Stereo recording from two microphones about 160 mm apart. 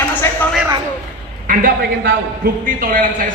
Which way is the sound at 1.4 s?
60° right (ahead or behind).